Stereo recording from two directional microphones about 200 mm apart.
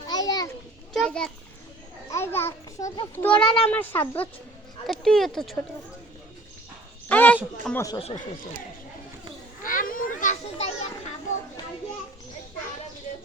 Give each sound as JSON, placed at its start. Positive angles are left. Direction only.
{"t": 0.1, "sound": "children playing", "side_deg": 20}
{"t": 0.9, "sound": "a sound", "side_deg": 5}
{"t": 2.9, "sound": "a child's voice", "side_deg": 20}
{"t": 3.2, "sound": "speech", "side_deg": 5}
{"t": 7.1, "sound": "speech", "side_deg": 10}
{"t": 9.6, "sound": "children playing", "side_deg": 45}